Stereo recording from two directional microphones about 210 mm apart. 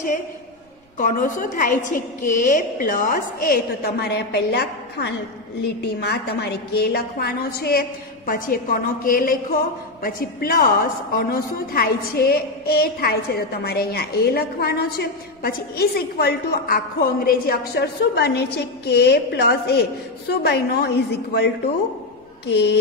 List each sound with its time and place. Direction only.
0.9 s a woman's voice: 40° left (ahead or behind)